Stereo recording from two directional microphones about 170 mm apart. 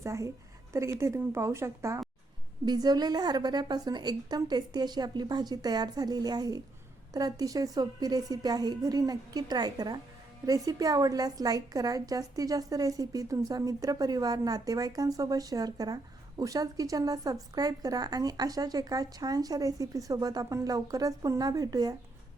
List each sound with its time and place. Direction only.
0.0 s a woman's voice: 15° right (ahead or behind)